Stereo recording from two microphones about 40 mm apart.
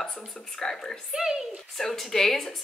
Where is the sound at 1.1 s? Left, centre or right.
Centre.